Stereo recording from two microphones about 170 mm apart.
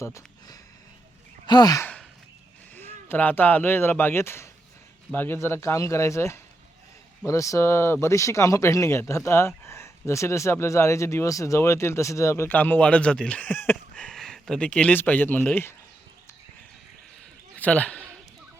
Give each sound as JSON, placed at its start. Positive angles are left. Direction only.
{"t": 0.0, "sound": "speech", "side_deg": 20}
{"t": 1.5, "sound": "sigh", "side_deg": 25}
{"t": 2.7, "sound": "speech", "side_deg": 10}
{"t": 17.6, "sound": "speech", "side_deg": 10}